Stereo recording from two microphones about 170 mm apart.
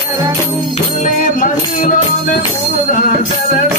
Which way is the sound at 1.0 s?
50° left (ahead or behind).